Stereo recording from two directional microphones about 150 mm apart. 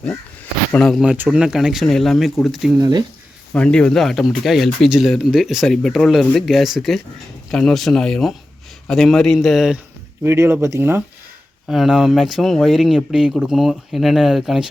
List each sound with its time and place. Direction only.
0.7 s speech: 5° left (ahead or behind)
1.0 s speech: 10° right (ahead or behind)
10.2 s speech: 15° right (ahead or behind)
11.7 s speech: 5° right (ahead or behind)